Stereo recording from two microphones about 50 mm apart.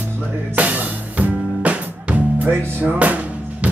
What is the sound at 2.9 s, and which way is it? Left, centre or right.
Speech, right.